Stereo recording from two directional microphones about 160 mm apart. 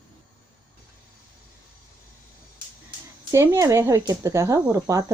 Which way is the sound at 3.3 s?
15° right (ahead or behind).